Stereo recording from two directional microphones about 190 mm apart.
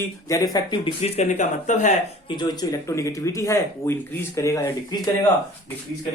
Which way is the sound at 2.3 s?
20° left (ahead or behind).